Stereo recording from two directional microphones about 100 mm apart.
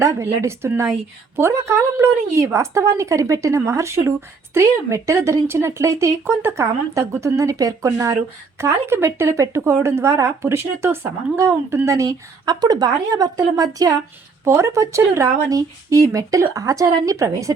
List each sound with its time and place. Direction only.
0.0 s speech: 30° right (ahead or behind)
12.5 s speech: 45° right (ahead or behind)
14.4 s speech: 30° right (ahead or behind)